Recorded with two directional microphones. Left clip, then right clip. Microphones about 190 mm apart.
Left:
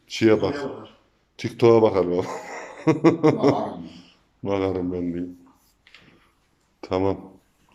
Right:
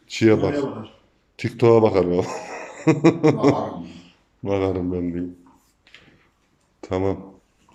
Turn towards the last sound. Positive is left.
turn(degrees=5)  # may be behind; listen again after turning